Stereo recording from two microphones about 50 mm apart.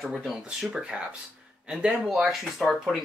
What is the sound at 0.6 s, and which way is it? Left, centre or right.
Speech, centre.